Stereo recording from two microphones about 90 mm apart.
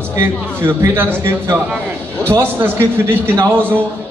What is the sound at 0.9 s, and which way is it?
A man's voice, 30° right (ahead or behind).